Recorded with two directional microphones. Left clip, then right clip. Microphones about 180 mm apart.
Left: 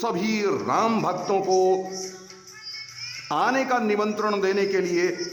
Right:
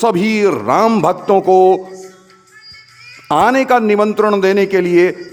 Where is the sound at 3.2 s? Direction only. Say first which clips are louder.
Right 11 dB; 50° right (ahead or behind).